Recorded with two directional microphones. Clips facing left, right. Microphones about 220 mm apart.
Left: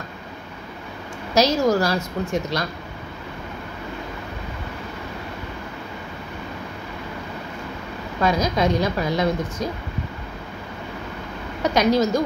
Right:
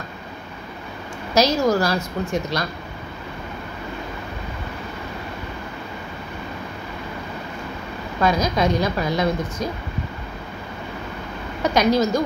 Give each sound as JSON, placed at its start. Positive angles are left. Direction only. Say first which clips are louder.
{"t": 1.3, "sound": "a woman's voice", "louder": "even", "side_deg": 25}
{"t": 8.2, "sound": "a woman's voice", "louder": "right 1 dB", "side_deg": 25}
{"t": 11.6, "sound": "a woman's voice", "louder": "even", "side_deg": 25}